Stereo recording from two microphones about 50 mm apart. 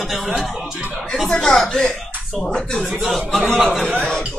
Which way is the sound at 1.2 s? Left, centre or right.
Centre.